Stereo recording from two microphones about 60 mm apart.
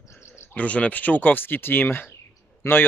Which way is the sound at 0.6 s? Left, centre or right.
Left.